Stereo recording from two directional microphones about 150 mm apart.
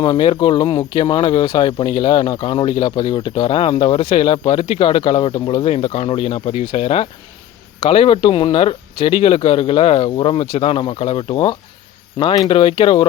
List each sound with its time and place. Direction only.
0.0 s speech: 35° left (ahead or behind)